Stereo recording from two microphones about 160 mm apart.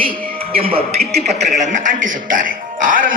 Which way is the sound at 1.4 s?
50° right (ahead or behind).